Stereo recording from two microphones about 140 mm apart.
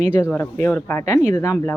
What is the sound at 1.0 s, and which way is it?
Speech, 55° right (ahead or behind).